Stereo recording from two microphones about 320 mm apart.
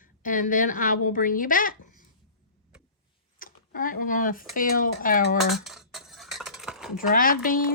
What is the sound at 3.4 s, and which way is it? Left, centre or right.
A woman's voice, left.